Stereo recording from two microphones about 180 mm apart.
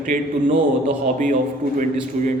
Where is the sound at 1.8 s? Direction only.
45° right (ahead or behind).